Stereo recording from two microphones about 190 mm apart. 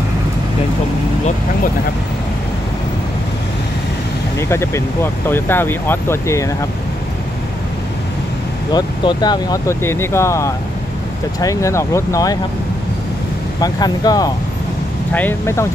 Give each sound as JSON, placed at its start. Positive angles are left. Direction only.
{"t": 4.4, "sound": "speech", "side_deg": 15}
{"t": 8.7, "sound": "speech", "side_deg": 20}
{"t": 13.6, "sound": "speech", "side_deg": 20}